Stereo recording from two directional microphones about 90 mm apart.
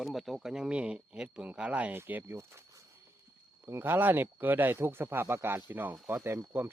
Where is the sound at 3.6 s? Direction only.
25° right (ahead or behind).